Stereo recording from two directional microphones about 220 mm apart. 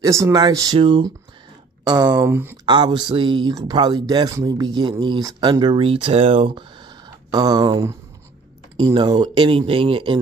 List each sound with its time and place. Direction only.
0.0 s speech: 15° right (ahead or behind)